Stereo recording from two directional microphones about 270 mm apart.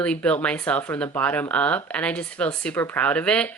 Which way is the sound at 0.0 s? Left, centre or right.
Centre.